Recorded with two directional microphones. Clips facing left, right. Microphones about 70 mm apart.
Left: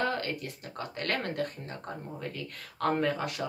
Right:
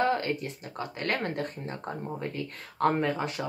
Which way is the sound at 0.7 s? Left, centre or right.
Centre.